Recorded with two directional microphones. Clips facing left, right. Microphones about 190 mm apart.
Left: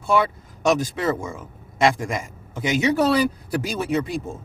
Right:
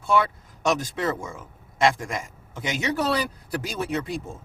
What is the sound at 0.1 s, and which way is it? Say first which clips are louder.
Speech: left 2 dB; 5° left (ahead or behind).